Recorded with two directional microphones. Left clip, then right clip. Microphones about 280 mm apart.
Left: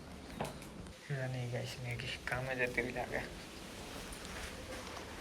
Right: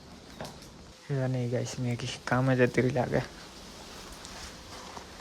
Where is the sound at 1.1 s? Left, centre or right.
Centre.